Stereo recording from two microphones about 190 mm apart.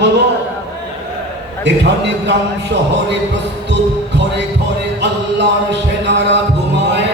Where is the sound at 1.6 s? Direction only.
65° right (ahead or behind).